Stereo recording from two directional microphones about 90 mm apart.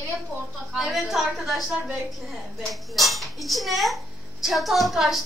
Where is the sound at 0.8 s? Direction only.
5° right (ahead or behind).